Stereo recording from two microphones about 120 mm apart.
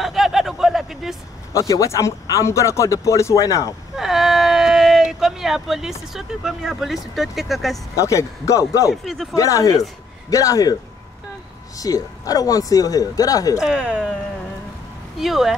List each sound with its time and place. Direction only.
0.0 s a sound: centre (ahead or behind)
1.5 s speech: 25° left (ahead or behind)
3.9 s speech: 5° right (ahead or behind)
7.9 s speech: 25° left (ahead or behind)
9.0 s speech: centre (ahead or behind)
9.3 s speech: 25° left (ahead or behind)
13.6 s speech: 5° right (ahead or behind)
15.1 s speech: centre (ahead or behind)